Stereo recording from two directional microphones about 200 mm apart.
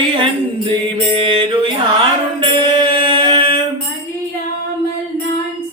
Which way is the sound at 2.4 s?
25° right (ahead or behind).